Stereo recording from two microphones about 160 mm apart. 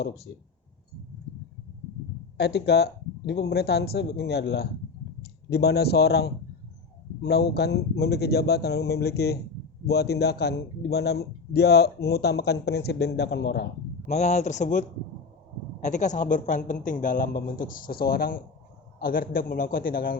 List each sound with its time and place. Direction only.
2.4 s speech: 90° left
14.1 s a woman's voice: 45° left (ahead or behind); by 20.1 s 65° left (ahead or behind)